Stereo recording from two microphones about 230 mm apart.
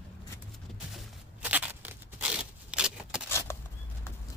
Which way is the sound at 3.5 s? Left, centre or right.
Centre.